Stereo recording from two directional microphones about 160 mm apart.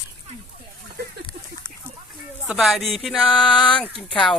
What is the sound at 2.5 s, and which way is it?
Speech, centre (ahead or behind).